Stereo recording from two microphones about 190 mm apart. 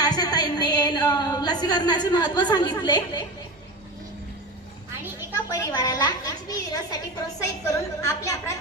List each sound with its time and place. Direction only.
0.0 s a woman's voice: 20° left (ahead or behind)
5.5 s a woman's voice: 20° left (ahead or behind)